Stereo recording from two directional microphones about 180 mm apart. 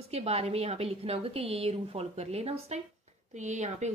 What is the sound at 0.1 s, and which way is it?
A woman's voice, 35° right (ahead or behind).